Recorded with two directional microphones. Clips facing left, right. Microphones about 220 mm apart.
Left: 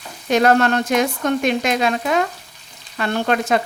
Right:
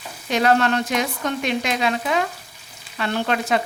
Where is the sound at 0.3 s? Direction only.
45° left (ahead or behind).